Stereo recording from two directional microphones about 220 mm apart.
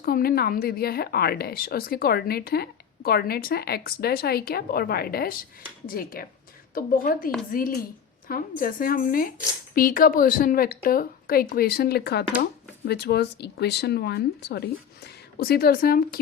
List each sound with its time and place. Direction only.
0.0 s a woman's voice: 45° left (ahead or behind)